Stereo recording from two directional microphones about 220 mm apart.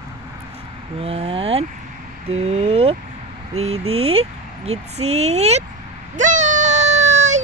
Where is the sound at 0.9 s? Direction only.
25° right (ahead or behind).